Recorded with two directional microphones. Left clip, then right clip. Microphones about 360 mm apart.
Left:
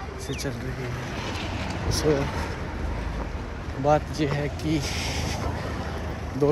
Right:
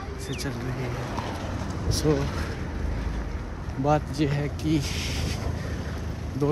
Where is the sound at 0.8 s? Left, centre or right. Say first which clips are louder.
Even; right.